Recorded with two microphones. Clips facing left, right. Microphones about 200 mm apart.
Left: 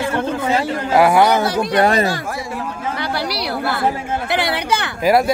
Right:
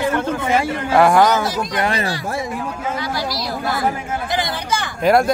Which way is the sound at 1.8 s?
45° left (ahead or behind).